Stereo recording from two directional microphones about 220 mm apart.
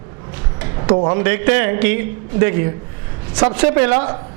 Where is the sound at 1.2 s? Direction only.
15° right (ahead or behind).